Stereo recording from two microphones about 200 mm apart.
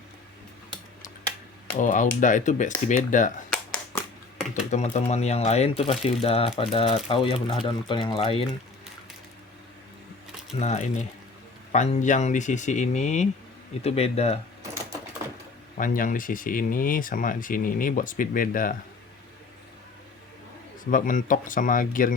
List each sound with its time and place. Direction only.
1.8 s speech: 40° left (ahead or behind)
4.5 s speech: 35° left (ahead or behind)
10.6 s speech: 35° left (ahead or behind)
15.8 s speech: 40° left (ahead or behind)
20.9 s speech: 40° left (ahead or behind)